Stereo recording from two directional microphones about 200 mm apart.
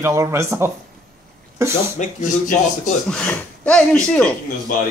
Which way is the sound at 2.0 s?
35° left (ahead or behind).